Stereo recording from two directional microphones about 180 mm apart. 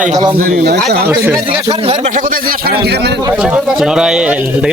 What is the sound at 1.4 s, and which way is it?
Speech, 30° right (ahead or behind).